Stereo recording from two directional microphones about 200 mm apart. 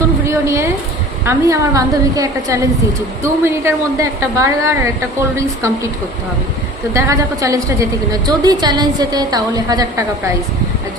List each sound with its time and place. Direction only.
0.3 s a woman's voice: 15° right (ahead or behind)
6.9 s a woman's voice: 15° right (ahead or behind)